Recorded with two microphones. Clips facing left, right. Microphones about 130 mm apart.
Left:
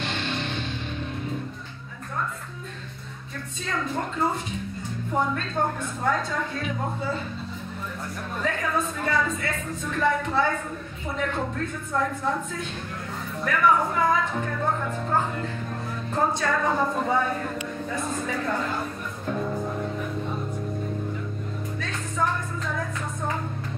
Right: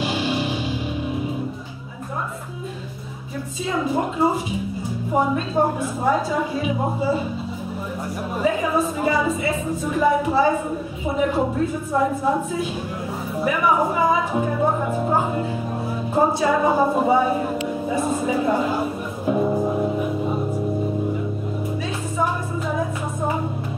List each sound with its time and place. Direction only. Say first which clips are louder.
0.0 s music: right 7 dB; 5° right (ahead or behind)
3.6 s a woman's voice: right 7 dB; 10° right (ahead or behind)
8.4 s a woman's voice: right 6 dB; 10° right (ahead or behind)
19.4 s music: right 9 dB; 30° right (ahead or behind)
19.8 s music: right 8 dB; 15° right (ahead or behind)